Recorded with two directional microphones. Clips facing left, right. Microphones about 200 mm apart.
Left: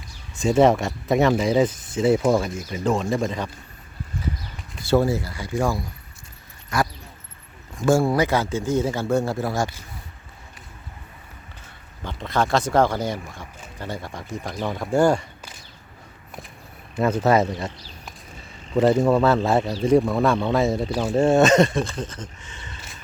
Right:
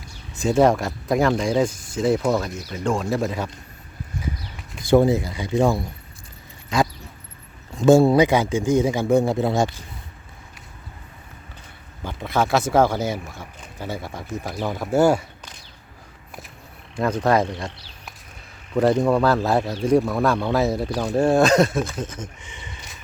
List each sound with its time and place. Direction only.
0.3 s speech: centre (ahead or behind)
4.8 s speech: 15° right (ahead or behind)
7.9 s speech: 20° right (ahead or behind)
12.0 s speech: 10° right (ahead or behind)
16.9 s speech: 5° left (ahead or behind)
18.8 s speech: centre (ahead or behind); by 22.7 s 15° right (ahead or behind)